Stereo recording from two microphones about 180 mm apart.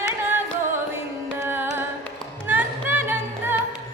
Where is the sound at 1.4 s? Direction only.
10° right (ahead or behind).